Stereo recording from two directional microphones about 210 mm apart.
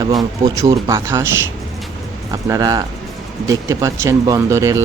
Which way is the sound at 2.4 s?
15° right (ahead or behind).